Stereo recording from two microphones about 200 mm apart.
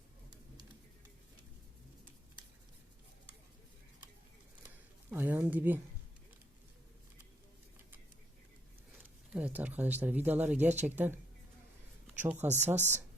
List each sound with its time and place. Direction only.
5.1 s speech: 10° right (ahead or behind)
9.3 s speech: 5° right (ahead or behind)
12.2 s speech: 10° right (ahead or behind)
12.7 s speech: 35° right (ahead or behind)